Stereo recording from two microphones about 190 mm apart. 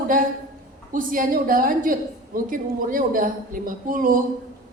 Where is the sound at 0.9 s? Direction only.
45° right (ahead or behind).